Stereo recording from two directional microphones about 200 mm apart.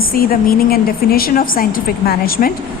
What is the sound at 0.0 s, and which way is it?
A woman's voice, 45° left (ahead or behind).